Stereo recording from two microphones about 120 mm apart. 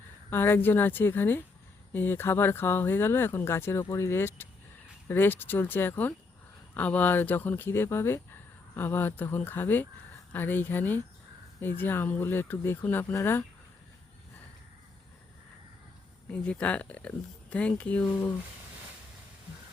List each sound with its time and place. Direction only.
0.3 s speech: 20° left (ahead or behind)
16.3 s speech: 10° left (ahead or behind)